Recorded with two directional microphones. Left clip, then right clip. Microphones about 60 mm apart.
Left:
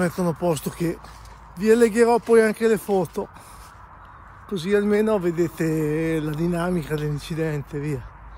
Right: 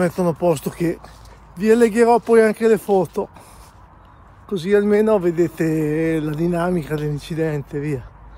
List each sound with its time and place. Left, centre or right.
0.0 s speech: right
4.5 s speech: right